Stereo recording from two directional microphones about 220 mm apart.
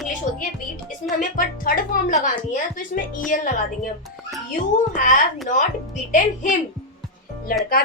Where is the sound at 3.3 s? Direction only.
40° left (ahead or behind).